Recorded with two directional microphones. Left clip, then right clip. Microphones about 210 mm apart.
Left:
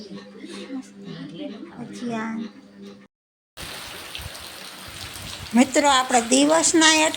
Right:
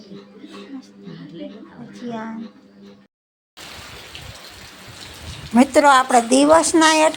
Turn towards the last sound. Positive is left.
turn(degrees=-10)  # may be behind; listen again after turning